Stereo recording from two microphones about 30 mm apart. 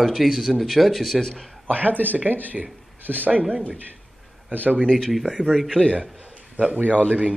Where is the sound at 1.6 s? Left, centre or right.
Right.